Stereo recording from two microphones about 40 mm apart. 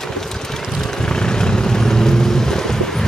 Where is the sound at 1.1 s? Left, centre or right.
Centre.